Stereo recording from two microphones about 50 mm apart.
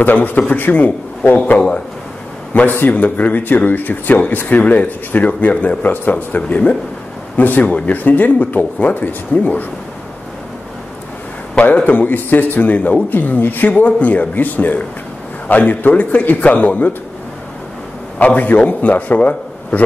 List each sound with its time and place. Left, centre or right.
0.0 s speech: left
2.7 s speech: left
11.6 s speech: left
18.2 s speech: left